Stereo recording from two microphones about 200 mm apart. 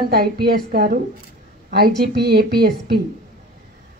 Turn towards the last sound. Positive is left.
turn(degrees=-50)  # may be behind; listen again after turning